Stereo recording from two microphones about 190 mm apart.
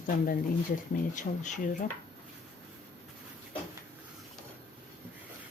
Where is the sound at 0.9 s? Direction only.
40° left (ahead or behind).